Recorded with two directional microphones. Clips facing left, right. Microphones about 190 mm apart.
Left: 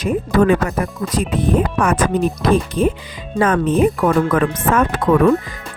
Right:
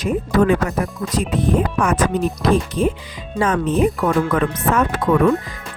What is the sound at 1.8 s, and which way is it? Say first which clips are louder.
Speech: left 2 dB; 50° left (ahead or behind).